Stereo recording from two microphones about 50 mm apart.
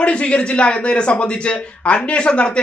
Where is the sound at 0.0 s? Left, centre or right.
Left.